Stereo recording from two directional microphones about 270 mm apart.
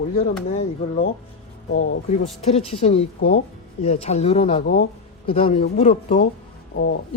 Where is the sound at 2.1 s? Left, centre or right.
Left.